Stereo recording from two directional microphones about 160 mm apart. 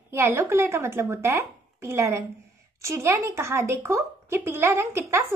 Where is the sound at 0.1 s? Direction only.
15° right (ahead or behind).